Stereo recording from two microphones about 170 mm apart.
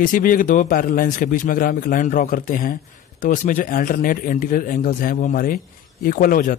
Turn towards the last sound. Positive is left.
turn(degrees=55)  # may be behind; listen again after turning